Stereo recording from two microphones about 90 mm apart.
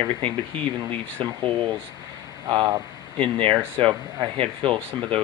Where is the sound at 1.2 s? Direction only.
70° right (ahead or behind).